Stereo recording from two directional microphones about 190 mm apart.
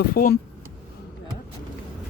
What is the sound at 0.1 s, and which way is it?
Speech, 50° left (ahead or behind).